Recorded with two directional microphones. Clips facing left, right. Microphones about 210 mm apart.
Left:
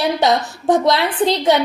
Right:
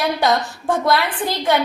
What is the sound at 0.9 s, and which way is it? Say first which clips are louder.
Speech: left 4 dB; 20° left (ahead or behind).